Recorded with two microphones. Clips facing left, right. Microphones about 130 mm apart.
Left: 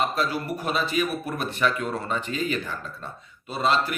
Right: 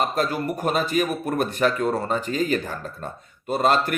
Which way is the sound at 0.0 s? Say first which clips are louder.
Right 2 dB; 45° right (ahead or behind).